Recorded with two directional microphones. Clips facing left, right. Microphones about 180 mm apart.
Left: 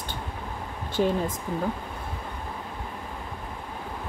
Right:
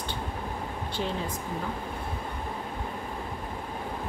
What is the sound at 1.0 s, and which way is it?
Speech, 45° left (ahead or behind).